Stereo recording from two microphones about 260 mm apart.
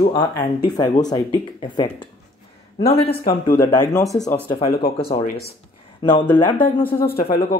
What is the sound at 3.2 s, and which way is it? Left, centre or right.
Speech, left.